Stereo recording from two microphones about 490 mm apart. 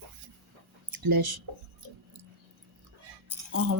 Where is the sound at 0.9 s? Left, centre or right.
Right.